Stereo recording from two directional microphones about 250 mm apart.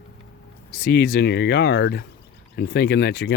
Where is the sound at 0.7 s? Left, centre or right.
Left.